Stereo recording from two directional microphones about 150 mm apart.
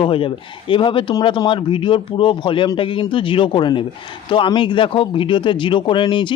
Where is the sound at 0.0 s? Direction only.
35° left (ahead or behind).